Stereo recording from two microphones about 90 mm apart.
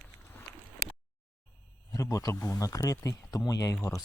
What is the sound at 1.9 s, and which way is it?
Speech, 35° left (ahead or behind).